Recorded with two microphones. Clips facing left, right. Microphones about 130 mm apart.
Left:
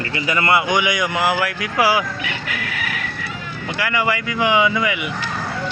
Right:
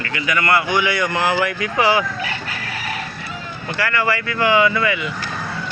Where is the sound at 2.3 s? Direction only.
35° right (ahead or behind).